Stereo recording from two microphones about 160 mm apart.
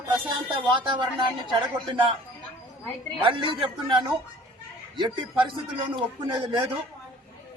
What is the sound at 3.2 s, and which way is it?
Speech, 35° right (ahead or behind).